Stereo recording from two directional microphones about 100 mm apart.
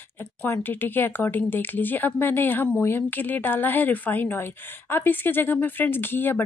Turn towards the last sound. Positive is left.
turn(degrees=20)  # may be behind; listen again after turning